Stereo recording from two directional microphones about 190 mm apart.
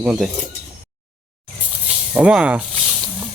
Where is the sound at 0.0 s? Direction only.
5° right (ahead or behind).